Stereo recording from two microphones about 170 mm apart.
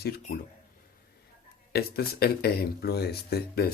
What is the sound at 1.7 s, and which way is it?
Speech, 65° left (ahead or behind).